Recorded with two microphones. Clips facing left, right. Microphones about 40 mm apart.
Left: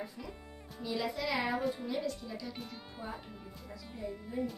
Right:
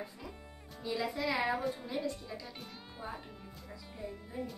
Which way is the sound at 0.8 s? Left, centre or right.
Centre.